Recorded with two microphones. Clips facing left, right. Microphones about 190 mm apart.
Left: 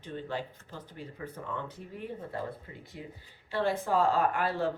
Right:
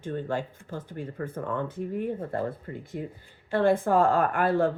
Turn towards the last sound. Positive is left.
turn(degrees=-50)  # may be behind; listen again after turning